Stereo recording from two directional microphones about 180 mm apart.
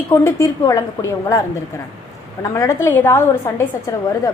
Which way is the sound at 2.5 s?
15° left (ahead or behind).